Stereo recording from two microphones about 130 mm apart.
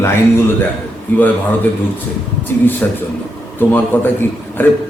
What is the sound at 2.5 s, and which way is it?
A man's voice, 15° left (ahead or behind).